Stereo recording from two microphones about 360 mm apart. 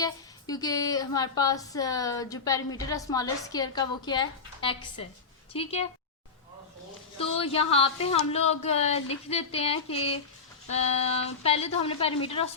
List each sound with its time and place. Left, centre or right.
0.0 s speech: centre
7.2 s speech: centre